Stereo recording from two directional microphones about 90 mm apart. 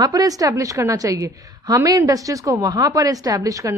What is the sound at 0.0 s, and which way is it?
A woman's voice, 45° right (ahead or behind).